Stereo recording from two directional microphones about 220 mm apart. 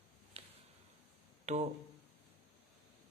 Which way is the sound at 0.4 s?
25° right (ahead or behind).